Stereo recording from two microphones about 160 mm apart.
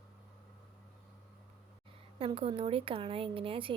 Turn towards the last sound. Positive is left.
turn(degrees=-35)  # may be behind; listen again after turning